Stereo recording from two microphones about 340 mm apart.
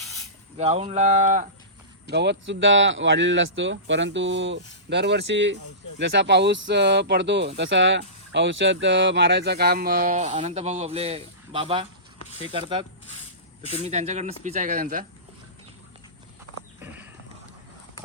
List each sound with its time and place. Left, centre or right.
0.5 s speech: centre
13.8 s speech: centre
16.8 s horse: centre